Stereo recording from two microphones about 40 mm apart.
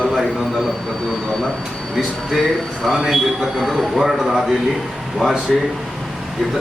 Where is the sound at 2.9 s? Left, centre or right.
Centre.